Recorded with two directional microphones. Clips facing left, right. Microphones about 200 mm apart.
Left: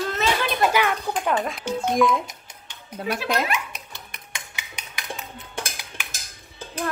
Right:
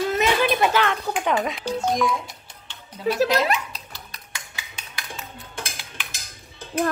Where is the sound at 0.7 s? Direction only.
5° left (ahead or behind).